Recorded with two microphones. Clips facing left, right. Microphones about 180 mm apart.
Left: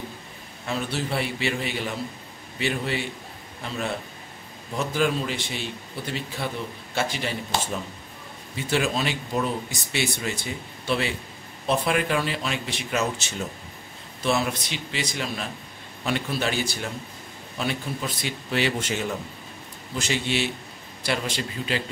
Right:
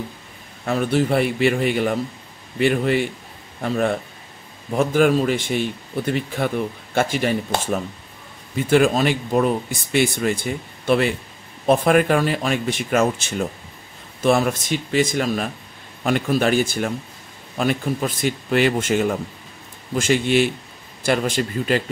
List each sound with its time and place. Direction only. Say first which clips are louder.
0.7 s a man's voice: right 9 dB; 50° right (ahead or behind)